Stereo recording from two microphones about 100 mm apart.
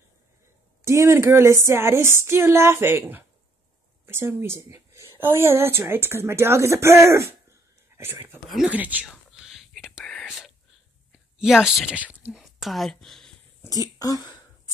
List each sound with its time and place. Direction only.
0.8 s a woman's voice: 30° right (ahead or behind)
8.5 s speech: 5° right (ahead or behind)
8.7 s speech: 15° right (ahead or behind)
9.1 s whispering: 5° right (ahead or behind)
11.1 s speech: 5° right (ahead or behind)
12.3 s speech: centre (ahead or behind)
13.7 s speech: 35° left (ahead or behind)